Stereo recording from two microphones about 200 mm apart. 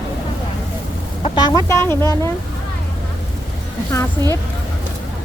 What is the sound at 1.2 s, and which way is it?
Speech, 20° left (ahead or behind).